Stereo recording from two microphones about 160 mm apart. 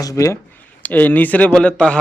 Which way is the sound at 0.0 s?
20° left (ahead or behind).